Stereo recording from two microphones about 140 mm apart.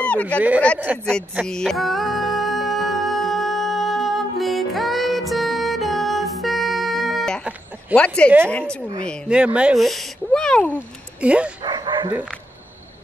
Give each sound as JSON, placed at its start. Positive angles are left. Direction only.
{"t": 0.0, "sound": "a sound", "side_deg": 10}
{"t": 0.9, "sound": "speech", "side_deg": -10}
{"t": 1.4, "sound": "music", "side_deg": 5}
{"t": 7.9, "sound": "speech", "side_deg": -10}
{"t": 8.5, "sound": "a woman's voice", "side_deg": 10}
{"t": 9.3, "sound": "speech", "side_deg": -5}
{"t": 11.1, "sound": "speech", "side_deg": -10}
{"t": 11.6, "sound": "dog", "side_deg": -30}
{"t": 12.1, "sound": "speech", "side_deg": -10}